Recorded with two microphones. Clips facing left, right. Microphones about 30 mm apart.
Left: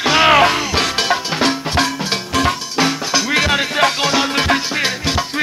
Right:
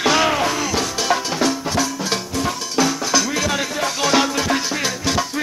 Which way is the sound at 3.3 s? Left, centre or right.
Left.